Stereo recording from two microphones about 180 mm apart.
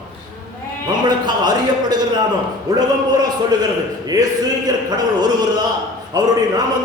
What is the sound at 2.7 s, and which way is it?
A man's voice, 20° right (ahead or behind).